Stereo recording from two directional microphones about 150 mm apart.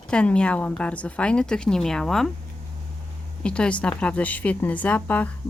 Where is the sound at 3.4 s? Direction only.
5° left (ahead or behind).